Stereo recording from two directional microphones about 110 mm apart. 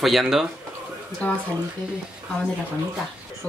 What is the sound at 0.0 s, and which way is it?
Speech, 5° right (ahead or behind).